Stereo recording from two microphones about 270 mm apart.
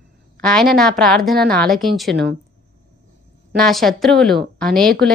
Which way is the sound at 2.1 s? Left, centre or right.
Right.